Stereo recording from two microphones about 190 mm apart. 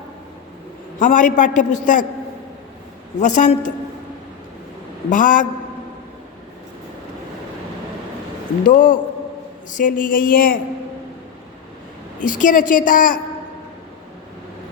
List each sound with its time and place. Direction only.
0.9 s a man's voice: 45° left (ahead or behind)
3.2 s a woman's voice: 40° left (ahead or behind)
5.0 s a man's voice: 45° left (ahead or behind)
8.6 s a man's voice: 45° left (ahead or behind)
12.2 s a man's voice: 45° left (ahead or behind)